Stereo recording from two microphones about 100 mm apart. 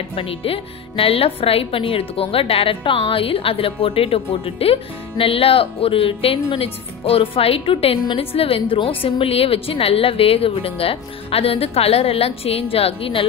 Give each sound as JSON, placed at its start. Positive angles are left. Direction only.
{"t": 0.1, "sound": "speech", "side_deg": 65}